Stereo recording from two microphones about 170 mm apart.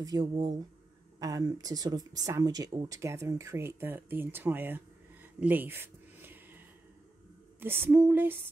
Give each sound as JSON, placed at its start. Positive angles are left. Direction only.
{"t": 0.0, "sound": "speech", "side_deg": -20}
{"t": 5.4, "sound": "a sound", "side_deg": -10}
{"t": 7.6, "sound": "speech", "side_deg": -15}